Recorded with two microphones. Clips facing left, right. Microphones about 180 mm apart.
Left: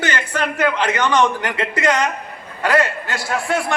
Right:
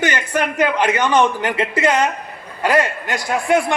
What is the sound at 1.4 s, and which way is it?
Speech, 25° right (ahead or behind).